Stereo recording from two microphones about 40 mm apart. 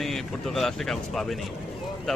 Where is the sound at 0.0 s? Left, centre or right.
Centre.